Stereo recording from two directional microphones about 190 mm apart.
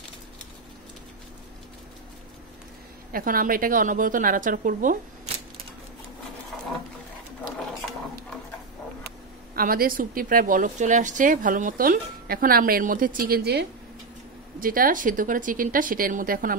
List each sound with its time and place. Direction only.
3.1 s a woman's voice: 50° right (ahead or behind)
9.6 s a woman's voice: 50° right (ahead or behind)
14.6 s a woman's voice: 45° right (ahead or behind)